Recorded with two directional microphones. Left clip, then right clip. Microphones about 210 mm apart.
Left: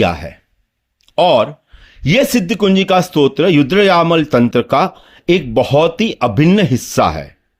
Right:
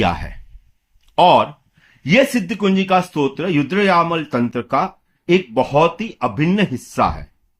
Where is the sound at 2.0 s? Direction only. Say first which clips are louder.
Left 2 dB; 40° left (ahead or behind).